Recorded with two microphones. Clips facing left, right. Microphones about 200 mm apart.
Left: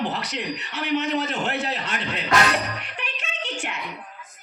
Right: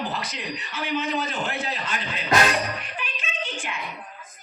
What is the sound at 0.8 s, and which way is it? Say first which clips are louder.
A man's voice: left 3 dB; 70° left (ahead or behind).